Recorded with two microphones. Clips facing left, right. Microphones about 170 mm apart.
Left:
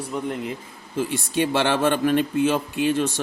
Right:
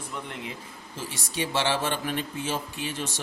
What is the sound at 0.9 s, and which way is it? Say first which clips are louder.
Speech: left 10 dB; 55° left (ahead or behind).